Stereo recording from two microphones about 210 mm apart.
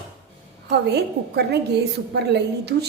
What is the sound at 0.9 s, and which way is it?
A woman's voice, 55° right (ahead or behind).